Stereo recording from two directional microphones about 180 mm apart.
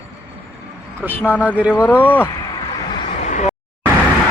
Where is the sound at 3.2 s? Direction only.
40° left (ahead or behind).